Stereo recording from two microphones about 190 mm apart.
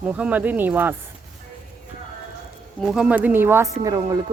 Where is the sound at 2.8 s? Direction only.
5° right (ahead or behind).